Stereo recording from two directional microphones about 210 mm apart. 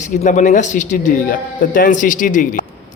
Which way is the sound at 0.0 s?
35° left (ahead or behind).